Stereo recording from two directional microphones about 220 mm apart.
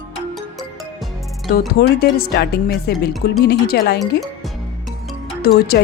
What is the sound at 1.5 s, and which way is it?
Speech, 45° left (ahead or behind).